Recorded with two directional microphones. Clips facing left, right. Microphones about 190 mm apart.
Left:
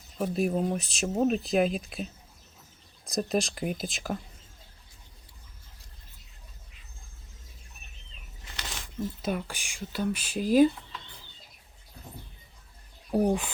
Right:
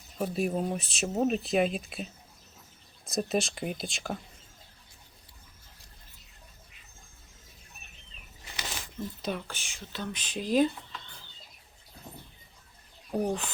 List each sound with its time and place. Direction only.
0.2 s speech: centre (ahead or behind)
3.1 s speech: centre (ahead or behind)
8.5 s a sound: 5° right (ahead or behind)
9.2 s speech: 10° left (ahead or behind)
13.1 s speech: 10° left (ahead or behind)